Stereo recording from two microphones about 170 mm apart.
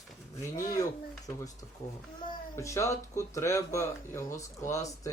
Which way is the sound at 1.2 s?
20° left (ahead or behind).